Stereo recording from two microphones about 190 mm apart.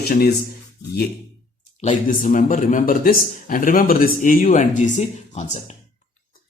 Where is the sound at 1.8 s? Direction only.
45° left (ahead or behind).